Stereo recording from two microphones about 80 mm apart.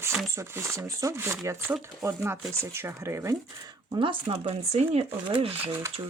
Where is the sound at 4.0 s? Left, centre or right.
Right.